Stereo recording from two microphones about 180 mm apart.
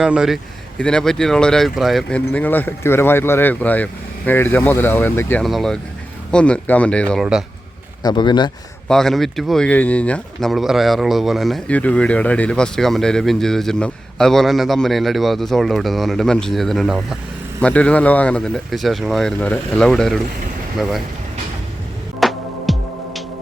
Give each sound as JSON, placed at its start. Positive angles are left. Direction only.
{"t": 0.0, "sound": "speech", "side_deg": -5}
{"t": 8.0, "sound": "speech", "side_deg": 25}
{"t": 8.9, "sound": "speech", "side_deg": 0}
{"t": 22.2, "sound": "music", "side_deg": 0}